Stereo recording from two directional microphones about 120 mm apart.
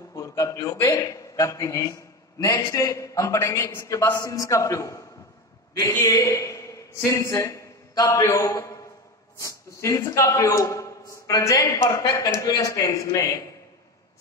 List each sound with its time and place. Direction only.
0.1 s a man's voice: 25° left (ahead or behind)